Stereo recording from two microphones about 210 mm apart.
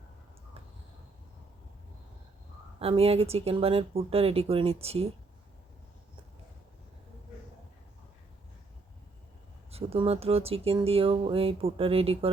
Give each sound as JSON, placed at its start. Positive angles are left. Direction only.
{"t": 2.7, "sound": "speech", "side_deg": -30}
{"t": 9.7, "sound": "speech", "side_deg": -30}